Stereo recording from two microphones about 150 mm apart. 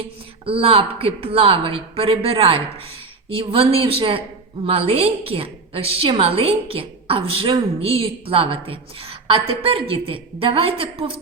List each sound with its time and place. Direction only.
0.0 s a woman's voice: 35° right (ahead or behind)